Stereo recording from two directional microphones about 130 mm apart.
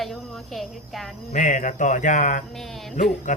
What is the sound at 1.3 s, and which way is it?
Speech, 75° left (ahead or behind).